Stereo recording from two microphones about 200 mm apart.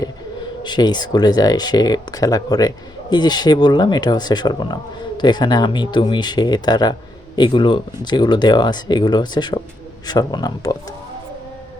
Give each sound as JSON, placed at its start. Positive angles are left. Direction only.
{"t": 0.6, "sound": "speech", "side_deg": 20}